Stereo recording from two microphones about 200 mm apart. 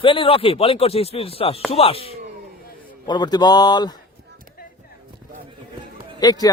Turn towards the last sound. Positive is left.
turn(degrees=20)  # may be behind; listen again after turning